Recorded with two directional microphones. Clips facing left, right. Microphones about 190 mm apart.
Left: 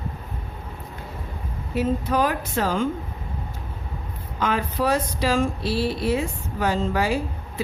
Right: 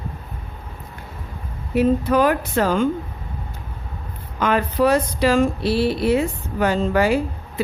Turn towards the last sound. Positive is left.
turn(degrees=-60)  # may be behind; listen again after turning